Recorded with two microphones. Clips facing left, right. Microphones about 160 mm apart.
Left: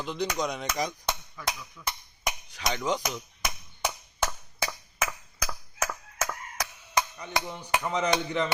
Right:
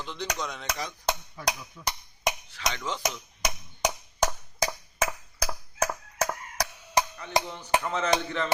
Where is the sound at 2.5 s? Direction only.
15° left (ahead or behind).